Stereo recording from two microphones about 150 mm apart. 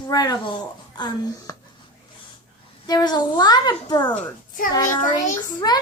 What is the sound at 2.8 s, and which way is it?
A woman's voice, 25° left (ahead or behind).